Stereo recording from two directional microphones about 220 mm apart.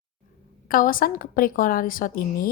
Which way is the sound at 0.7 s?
40° left (ahead or behind).